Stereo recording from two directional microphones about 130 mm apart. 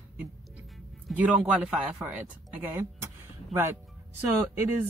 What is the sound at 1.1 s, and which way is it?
Speech, 10° right (ahead or behind).